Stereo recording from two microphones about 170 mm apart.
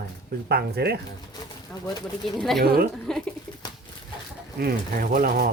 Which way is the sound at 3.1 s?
5° left (ahead or behind).